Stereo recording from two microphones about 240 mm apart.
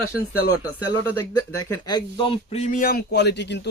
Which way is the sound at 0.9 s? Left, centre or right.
Centre.